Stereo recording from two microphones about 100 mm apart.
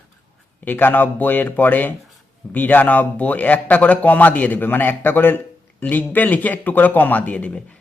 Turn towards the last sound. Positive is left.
turn(degrees=10)  # may be behind; listen again after turning